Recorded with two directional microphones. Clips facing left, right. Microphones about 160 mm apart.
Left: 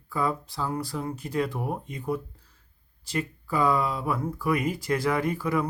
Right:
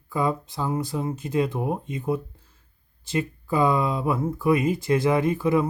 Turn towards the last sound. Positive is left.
turn(degrees=-25)  # may be behind; listen again after turning